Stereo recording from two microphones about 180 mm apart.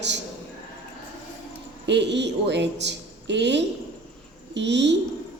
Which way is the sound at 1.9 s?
80° right.